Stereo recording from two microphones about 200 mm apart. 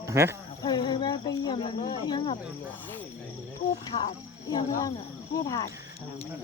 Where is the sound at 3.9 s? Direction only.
35° left (ahead or behind).